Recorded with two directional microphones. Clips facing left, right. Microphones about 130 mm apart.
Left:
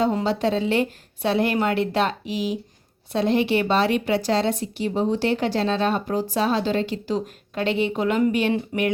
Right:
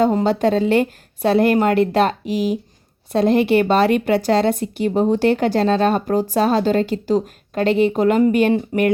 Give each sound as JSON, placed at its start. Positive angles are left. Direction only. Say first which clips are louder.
{"t": 0.0, "sound": "speech", "louder": "right 5 dB", "side_deg": -45}